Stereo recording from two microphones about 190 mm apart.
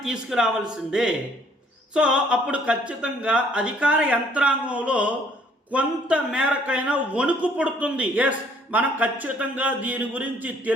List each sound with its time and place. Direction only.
0.0 s a man's voice: 5° right (ahead or behind)